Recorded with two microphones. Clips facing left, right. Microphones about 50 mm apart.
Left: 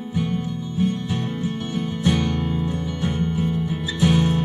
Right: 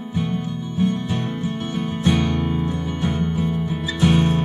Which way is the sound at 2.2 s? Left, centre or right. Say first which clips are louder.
Right 2 dB; right.